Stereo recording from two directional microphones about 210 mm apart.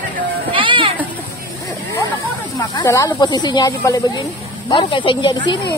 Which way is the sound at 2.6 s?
15° left (ahead or behind).